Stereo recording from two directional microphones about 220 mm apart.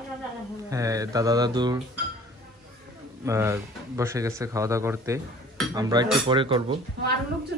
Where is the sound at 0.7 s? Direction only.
15° right (ahead or behind).